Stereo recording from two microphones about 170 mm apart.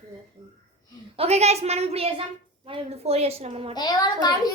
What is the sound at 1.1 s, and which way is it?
A woman's voice, 40° right (ahead or behind).